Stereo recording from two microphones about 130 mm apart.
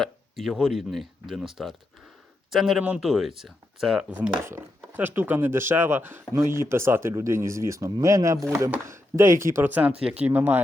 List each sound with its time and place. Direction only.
0.0 s speech: centre (ahead or behind)
4.1 s speech: 15° right (ahead or behind)